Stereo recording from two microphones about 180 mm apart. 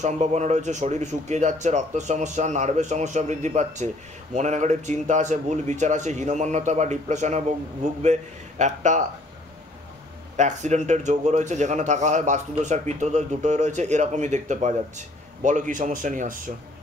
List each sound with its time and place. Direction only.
0.0 s speech: 40° right (ahead or behind)
10.3 s speech: 40° right (ahead or behind)